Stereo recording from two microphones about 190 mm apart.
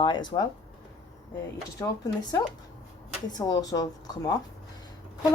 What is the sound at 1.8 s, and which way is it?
Speech, 20° left (ahead or behind).